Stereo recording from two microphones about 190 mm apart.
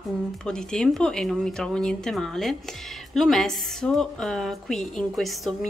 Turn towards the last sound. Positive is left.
turn(degrees=0)  # may be behind; listen again after turning